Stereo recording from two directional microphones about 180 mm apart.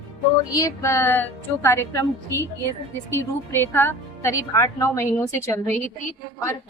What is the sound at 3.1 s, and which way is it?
A woman's voice, 15° left (ahead or behind).